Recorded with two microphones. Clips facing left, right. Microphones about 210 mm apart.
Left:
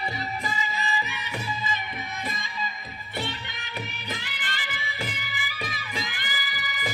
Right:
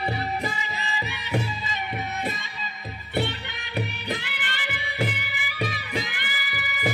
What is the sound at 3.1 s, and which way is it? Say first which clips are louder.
Music: right 6 dB; 60° right (ahead or behind).